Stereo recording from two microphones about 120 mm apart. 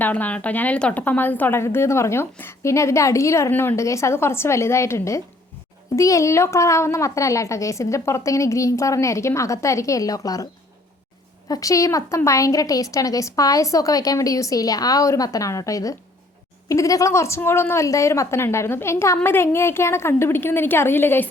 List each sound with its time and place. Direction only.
0.0 s a woman's voice: 15° left (ahead or behind)